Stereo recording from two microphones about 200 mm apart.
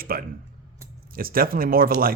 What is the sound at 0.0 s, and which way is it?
Speech, 45° right (ahead or behind).